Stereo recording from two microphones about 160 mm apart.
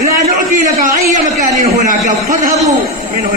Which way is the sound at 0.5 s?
55° right (ahead or behind).